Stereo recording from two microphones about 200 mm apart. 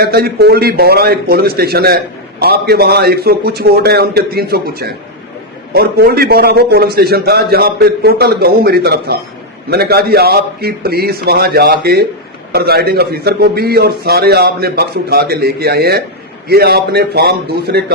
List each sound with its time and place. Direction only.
0.0 s a man's voice: 50° right (ahead or behind)